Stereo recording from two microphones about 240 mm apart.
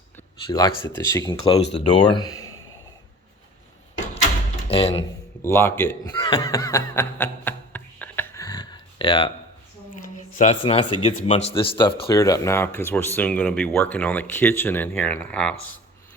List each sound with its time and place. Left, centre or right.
0.4 s speech: centre
4.7 s speech: left
5.4 s snicker: centre
10.3 s speech: left; by 15.5 s centre